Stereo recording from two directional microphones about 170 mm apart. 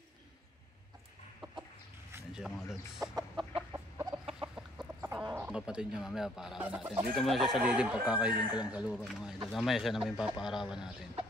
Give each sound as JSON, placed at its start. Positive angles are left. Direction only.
{"t": 2.3, "sound": "speech", "side_deg": -5}
{"t": 4.1, "sound": "chicken", "side_deg": -25}
{"t": 4.4, "sound": "speech", "side_deg": -5}